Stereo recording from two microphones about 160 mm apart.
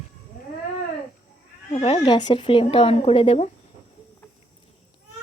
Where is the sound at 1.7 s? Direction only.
40° left (ahead or behind).